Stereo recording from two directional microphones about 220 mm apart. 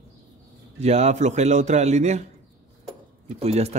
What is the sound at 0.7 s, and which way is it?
Speech, 30° right (ahead or behind).